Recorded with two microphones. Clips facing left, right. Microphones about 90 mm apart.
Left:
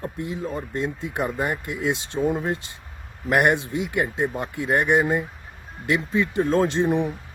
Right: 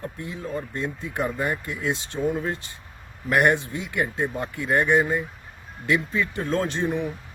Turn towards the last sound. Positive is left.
turn(degrees=20)  # may be behind; listen again after turning